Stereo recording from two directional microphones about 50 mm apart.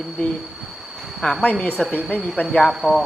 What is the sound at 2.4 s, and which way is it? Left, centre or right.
Speech, left.